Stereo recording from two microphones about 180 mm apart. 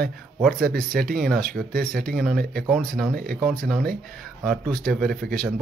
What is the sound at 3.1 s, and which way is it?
Speech, 60° right (ahead or behind).